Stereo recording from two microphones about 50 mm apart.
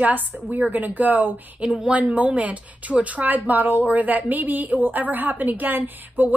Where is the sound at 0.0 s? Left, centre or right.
Right.